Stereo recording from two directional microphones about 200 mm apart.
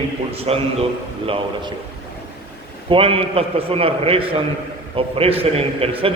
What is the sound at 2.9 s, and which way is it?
A man's voice, 25° right (ahead or behind).